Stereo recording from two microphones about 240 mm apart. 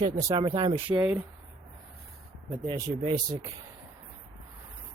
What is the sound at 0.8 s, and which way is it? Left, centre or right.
Speech, centre.